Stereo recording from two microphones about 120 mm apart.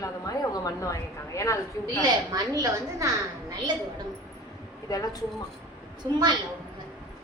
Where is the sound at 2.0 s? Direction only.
30° right (ahead or behind).